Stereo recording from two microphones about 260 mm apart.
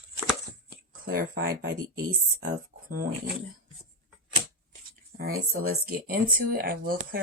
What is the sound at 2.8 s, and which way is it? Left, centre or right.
Speech, right.